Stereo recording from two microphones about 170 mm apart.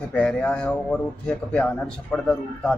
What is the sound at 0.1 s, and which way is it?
A man's voice, 5° left (ahead or behind).